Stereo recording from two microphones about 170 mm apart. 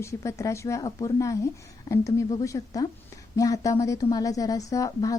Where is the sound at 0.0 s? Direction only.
15° left (ahead or behind).